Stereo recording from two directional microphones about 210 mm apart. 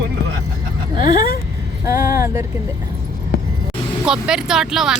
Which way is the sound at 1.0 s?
45° left (ahead or behind).